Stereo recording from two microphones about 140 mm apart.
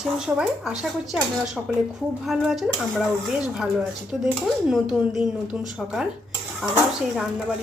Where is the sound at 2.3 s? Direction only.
Centre (ahead or behind).